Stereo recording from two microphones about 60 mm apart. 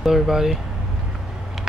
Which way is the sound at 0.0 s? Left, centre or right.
Centre.